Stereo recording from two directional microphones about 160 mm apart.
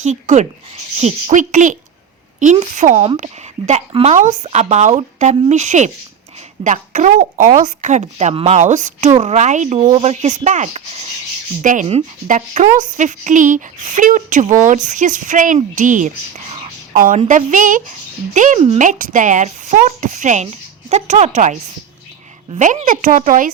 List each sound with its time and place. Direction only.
0.0 s speech: 45° right (ahead or behind)
11.6 s speech: 55° right (ahead or behind)